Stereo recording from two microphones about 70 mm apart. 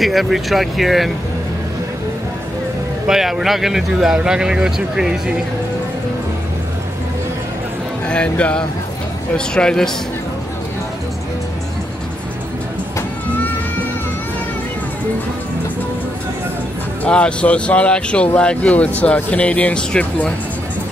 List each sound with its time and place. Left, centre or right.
0.0 s speech: centre
3.1 s speech: centre
8.1 s speech: centre
17.0 s speech: centre